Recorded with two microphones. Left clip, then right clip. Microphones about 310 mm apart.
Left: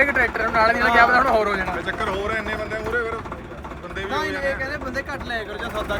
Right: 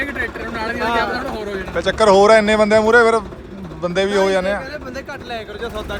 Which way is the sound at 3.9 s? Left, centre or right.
Centre.